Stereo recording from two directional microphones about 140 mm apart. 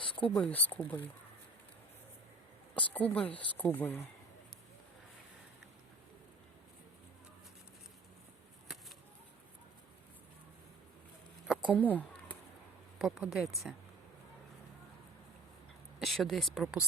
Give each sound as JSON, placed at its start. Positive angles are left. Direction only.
{"t": 0.0, "sound": "a sound", "side_deg": 40}
{"t": 0.3, "sound": "speech", "side_deg": 10}
{"t": 2.7, "sound": "speech", "side_deg": 10}
{"t": 11.4, "sound": "a sound", "side_deg": -5}
{"t": 11.7, "sound": "speech", "side_deg": 10}
{"t": 13.0, "sound": "speech", "side_deg": 0}
{"t": 16.0, "sound": "speech", "side_deg": 0}